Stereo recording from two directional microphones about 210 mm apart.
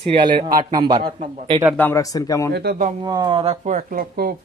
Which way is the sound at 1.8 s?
15° left (ahead or behind).